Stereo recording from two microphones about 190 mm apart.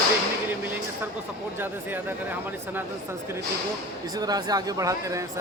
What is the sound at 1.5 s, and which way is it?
Speech, 10° right (ahead or behind).